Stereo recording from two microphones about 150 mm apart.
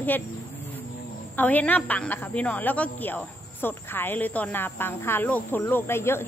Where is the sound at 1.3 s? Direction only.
10° left (ahead or behind).